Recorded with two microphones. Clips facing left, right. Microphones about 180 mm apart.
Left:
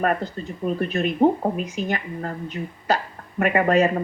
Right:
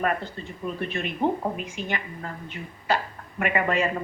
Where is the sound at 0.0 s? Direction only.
45° left (ahead or behind).